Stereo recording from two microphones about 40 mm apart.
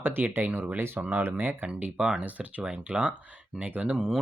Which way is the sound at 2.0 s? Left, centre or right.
Right.